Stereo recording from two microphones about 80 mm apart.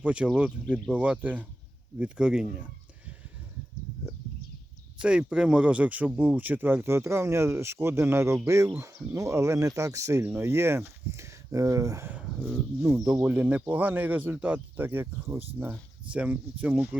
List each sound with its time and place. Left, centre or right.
0.0 s speech: centre
5.0 s speech: centre; by 12.0 s right
12.0 s a sound: centre
12.4 s speech: centre
13.1 s speech: centre
16.1 s speech: centre